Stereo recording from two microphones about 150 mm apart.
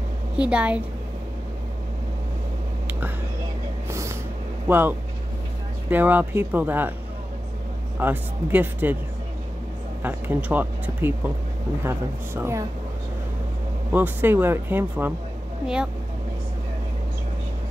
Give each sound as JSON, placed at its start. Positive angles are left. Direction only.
{"t": 0.4, "sound": "speech", "side_deg": -10}
{"t": 3.9, "sound": "snort", "side_deg": -20}
{"t": 4.6, "sound": "speech", "side_deg": -15}
{"t": 8.0, "sound": "speech", "side_deg": -10}
{"t": 10.0, "sound": "speech", "side_deg": -10}
{"t": 13.9, "sound": "speech", "side_deg": -15}